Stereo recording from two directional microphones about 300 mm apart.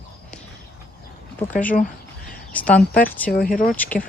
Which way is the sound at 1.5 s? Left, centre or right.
Centre.